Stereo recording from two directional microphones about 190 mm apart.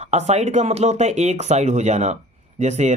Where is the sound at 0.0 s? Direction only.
35° right (ahead or behind).